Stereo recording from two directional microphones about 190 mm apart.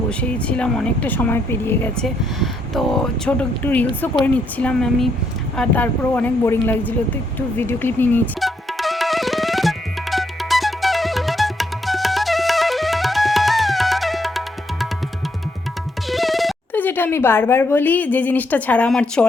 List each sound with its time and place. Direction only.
0.1 s speech: 5° left (ahead or behind)
7.3 s music: 10° left (ahead or behind)
16.0 s speech: centre (ahead or behind)